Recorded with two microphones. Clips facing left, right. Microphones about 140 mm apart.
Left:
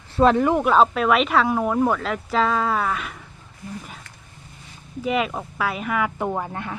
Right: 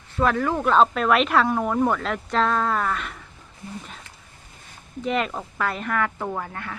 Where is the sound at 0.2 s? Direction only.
20° left (ahead or behind).